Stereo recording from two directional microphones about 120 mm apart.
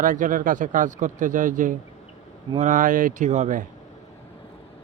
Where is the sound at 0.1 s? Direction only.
90° right; by 3.6 s 75° right (ahead or behind).